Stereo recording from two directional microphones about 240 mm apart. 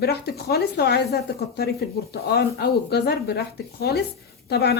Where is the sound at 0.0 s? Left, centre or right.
Left.